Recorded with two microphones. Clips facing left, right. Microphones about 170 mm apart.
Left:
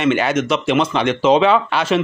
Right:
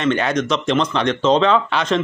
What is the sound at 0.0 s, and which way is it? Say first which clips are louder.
Speech: left 2 dB; 5° left (ahead or behind).